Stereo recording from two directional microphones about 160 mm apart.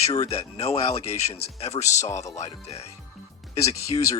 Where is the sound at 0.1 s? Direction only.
40° left (ahead or behind).